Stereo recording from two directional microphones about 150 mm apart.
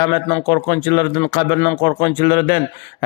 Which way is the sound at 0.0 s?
35° left (ahead or behind).